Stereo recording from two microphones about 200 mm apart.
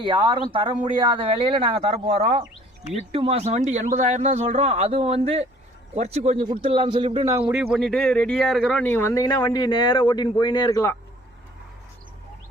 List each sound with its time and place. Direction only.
0.0 s a man's voice: 20° right (ahead or behind); by 10.9 s 15° left (ahead or behind)